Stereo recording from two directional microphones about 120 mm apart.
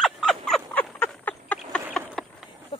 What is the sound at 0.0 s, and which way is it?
Frog, 5° left (ahead or behind).